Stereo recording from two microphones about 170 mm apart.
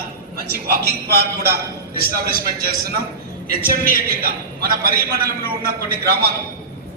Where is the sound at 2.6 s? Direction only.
65° right (ahead or behind).